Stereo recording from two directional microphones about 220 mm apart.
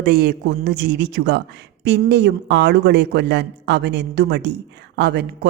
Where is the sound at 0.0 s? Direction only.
45° right (ahead or behind).